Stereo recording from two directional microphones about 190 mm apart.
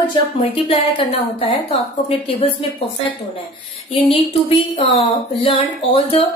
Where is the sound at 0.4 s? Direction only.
30° left (ahead or behind).